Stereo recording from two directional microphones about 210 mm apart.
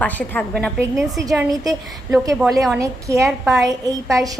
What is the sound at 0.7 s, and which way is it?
Speech, 15° right (ahead or behind).